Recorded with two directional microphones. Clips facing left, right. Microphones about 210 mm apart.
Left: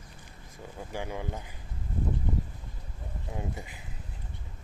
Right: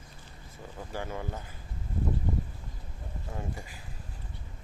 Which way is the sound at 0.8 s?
15° left (ahead or behind).